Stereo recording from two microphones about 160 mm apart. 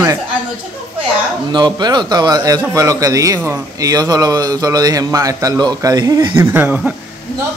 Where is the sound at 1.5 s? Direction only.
25° right (ahead or behind); by 7.0 s 10° right (ahead or behind).